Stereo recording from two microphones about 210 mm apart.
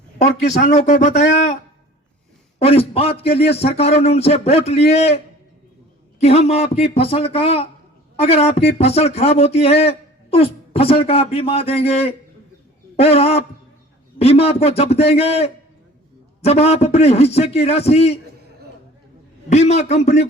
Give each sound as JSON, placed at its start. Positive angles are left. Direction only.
{"t": 0.5, "sound": "a man's voice", "side_deg": 40}
{"t": 1.2, "sound": "speech", "side_deg": 60}
{"t": 2.6, "sound": "speech", "side_deg": 30}
{"t": 19.5, "sound": "a man's voice", "side_deg": 30}